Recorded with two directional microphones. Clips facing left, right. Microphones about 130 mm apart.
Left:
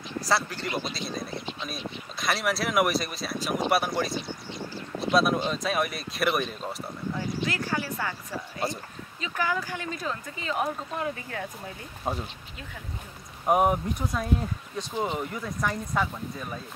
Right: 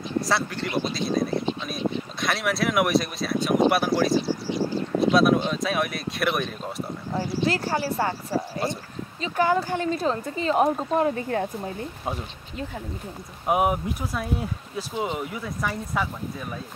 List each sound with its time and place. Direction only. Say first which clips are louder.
0.2 s speech: right 1 dB; centre (ahead or behind)
4.3 s speech: right 11 dB; 90° right
5.1 s speech: right 2 dB; centre (ahead or behind)
7.1 s speech: right 5 dB; 30° right (ahead or behind)
13.5 s speech: even; 5° right (ahead or behind)